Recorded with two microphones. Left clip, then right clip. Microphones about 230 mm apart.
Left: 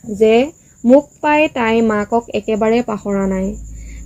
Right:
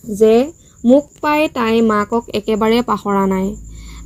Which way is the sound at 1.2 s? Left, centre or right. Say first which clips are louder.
Left 2 dB; right.